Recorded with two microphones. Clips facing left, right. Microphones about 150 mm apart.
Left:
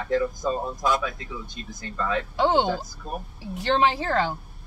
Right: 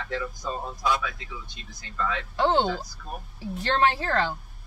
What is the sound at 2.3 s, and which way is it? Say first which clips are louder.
A woman's voice: left 1 dB; 10° left (ahead or behind).